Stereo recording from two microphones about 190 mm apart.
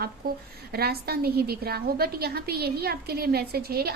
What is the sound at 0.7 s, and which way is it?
A woman's voice, 55° right (ahead or behind).